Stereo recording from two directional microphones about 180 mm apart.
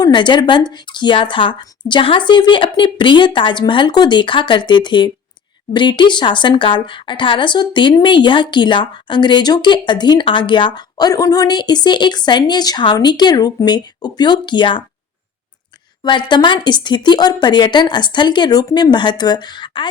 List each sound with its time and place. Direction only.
0.0 s a woman's voice: 25° left (ahead or behind)
16.0 s a woman's voice: 25° left (ahead or behind)